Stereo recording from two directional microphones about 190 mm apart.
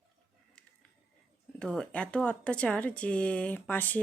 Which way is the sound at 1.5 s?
5° left (ahead or behind).